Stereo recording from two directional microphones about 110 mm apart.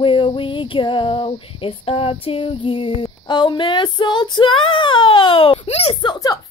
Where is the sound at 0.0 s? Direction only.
50° left (ahead or behind).